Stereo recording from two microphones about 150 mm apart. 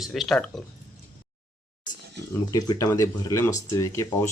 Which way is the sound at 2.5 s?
20° left (ahead or behind).